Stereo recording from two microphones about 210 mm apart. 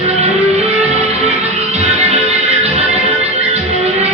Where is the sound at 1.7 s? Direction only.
30° right (ahead or behind).